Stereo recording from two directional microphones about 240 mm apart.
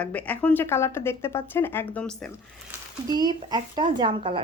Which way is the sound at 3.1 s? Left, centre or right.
Centre.